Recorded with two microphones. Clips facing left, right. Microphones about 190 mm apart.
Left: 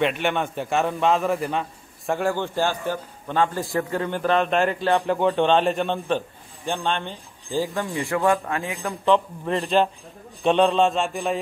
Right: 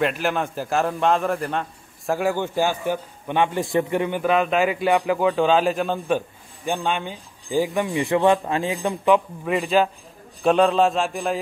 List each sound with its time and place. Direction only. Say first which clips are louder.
0.0 s a man's voice: even; centre (ahead or behind); by 8.8 s 30° right (ahead or behind)
8.8 s a man's voice: right 1 dB; 10° right (ahead or behind)